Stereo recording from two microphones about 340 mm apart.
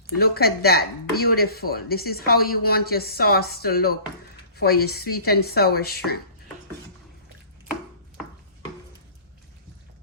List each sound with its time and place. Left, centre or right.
0.1 s speech: left